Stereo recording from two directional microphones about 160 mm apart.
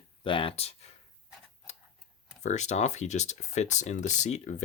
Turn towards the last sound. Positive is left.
turn(degrees=45)  # may be behind; listen again after turning